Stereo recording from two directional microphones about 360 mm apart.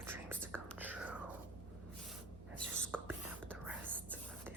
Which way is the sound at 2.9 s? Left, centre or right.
Centre.